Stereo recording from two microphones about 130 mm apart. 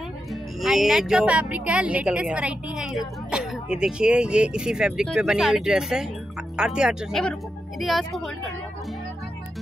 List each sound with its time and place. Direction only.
0.3 s speech: centre (ahead or behind)